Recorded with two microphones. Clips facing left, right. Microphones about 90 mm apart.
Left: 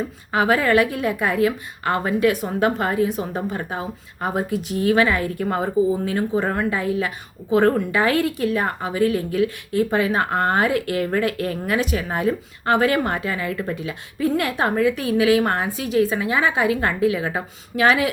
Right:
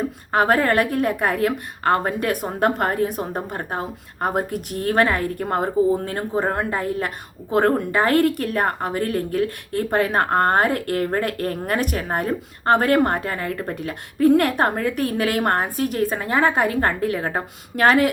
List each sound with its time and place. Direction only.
0.3 s a woman's voice: 50° right (ahead or behind)
13.7 s a woman's voice: 50° right (ahead or behind)